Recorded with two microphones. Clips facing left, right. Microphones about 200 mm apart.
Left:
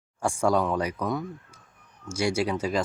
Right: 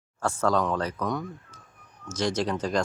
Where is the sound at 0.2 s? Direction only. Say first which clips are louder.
Left 1 dB; 10° left (ahead or behind).